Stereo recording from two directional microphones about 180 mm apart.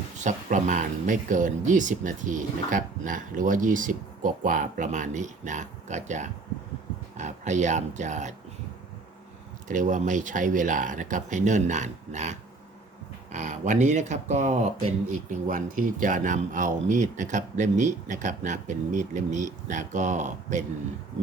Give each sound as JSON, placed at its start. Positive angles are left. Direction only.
{"t": 0.2, "sound": "speech", "side_deg": -40}
{"t": 9.6, "sound": "speech", "side_deg": -45}